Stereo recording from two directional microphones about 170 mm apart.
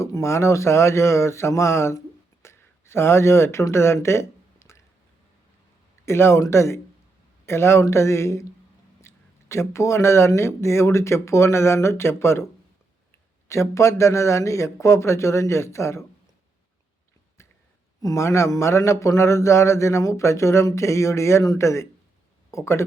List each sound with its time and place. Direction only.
0.0 s speech: 15° left (ahead or behind)
2.4 s a sound: 15° left (ahead or behind)
6.1 s speech: 15° left (ahead or behind)
13.5 s speech: 15° left (ahead or behind)
18.0 s speech: 15° left (ahead or behind)